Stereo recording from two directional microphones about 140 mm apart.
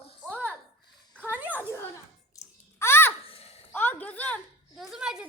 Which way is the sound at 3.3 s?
45° left (ahead or behind).